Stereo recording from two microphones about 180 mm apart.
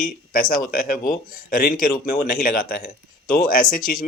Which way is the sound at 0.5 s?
50° left (ahead or behind).